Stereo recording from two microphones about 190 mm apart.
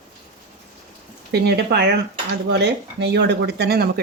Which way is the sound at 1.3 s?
60° right (ahead or behind).